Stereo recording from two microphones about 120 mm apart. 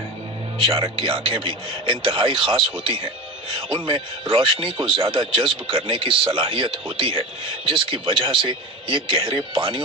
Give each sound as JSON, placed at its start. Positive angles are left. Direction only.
{"t": 0.6, "sound": "speech", "side_deg": -45}